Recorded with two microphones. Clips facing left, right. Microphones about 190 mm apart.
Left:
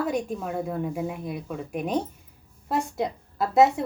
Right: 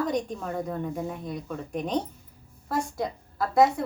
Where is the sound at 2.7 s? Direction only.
20° left (ahead or behind).